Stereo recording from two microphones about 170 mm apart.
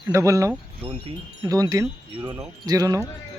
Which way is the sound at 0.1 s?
15° right (ahead or behind).